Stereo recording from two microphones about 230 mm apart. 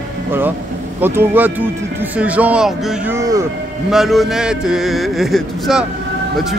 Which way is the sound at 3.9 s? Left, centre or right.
Centre.